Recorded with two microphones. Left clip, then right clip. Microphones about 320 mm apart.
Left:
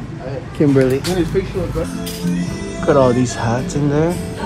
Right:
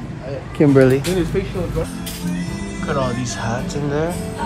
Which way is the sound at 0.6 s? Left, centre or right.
Right.